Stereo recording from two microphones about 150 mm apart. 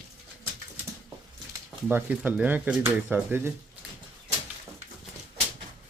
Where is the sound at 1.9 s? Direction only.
10° right (ahead or behind).